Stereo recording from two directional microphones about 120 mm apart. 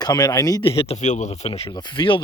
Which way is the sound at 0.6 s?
50° left (ahead or behind).